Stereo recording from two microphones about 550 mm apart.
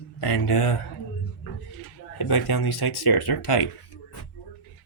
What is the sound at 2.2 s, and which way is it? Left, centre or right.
Speech, left.